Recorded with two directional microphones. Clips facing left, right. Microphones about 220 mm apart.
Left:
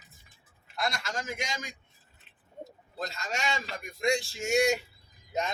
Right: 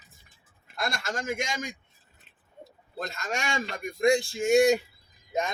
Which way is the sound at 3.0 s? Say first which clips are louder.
Right 2 dB; 55° right (ahead or behind).